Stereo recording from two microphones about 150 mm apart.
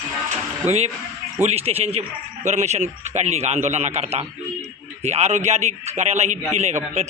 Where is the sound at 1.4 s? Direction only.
45° right (ahead or behind).